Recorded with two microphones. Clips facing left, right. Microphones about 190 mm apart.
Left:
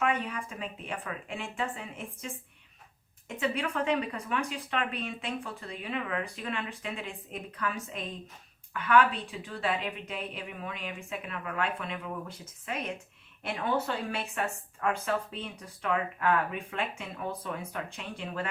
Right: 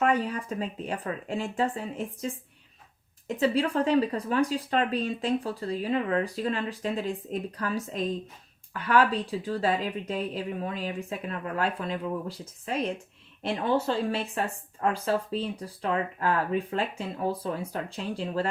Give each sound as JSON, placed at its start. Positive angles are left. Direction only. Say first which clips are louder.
{"t": 0.0, "sound": "a woman's voice", "louder": "right 5 dB", "side_deg": -35}